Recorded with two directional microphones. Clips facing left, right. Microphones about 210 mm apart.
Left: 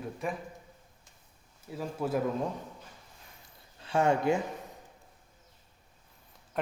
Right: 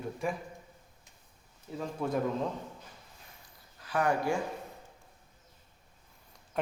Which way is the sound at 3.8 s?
25° left (ahead or behind).